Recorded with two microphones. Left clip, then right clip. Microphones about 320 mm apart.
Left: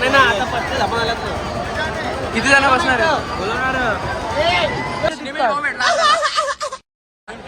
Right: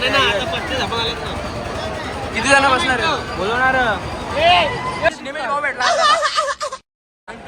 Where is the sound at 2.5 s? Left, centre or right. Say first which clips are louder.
Left 1 dB; centre.